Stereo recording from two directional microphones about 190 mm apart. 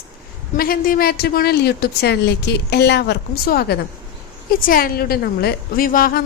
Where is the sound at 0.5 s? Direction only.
50° left (ahead or behind).